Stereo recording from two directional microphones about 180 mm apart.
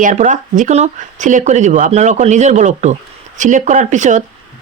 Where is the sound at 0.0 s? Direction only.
45° right (ahead or behind).